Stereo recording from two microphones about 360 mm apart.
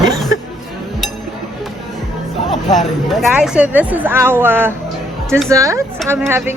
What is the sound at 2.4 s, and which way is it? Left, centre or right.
A woman's voice, centre.